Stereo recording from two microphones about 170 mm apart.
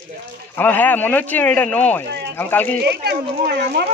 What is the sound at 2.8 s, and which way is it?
Speech, 75° right (ahead or behind).